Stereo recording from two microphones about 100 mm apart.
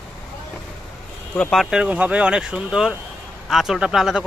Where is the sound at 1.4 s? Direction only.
5° left (ahead or behind).